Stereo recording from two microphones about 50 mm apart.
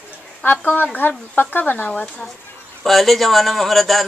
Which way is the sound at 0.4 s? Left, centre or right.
Left.